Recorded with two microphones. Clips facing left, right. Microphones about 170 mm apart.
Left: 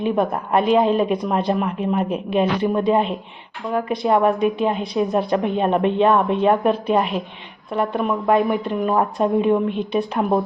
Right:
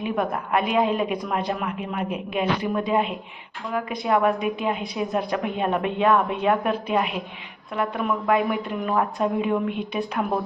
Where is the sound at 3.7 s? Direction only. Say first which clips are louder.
Left 6 dB; 40° left (ahead or behind).